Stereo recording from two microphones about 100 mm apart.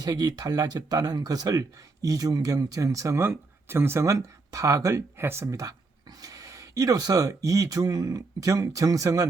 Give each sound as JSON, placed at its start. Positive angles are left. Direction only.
{"t": 0.0, "sound": "speech", "side_deg": -40}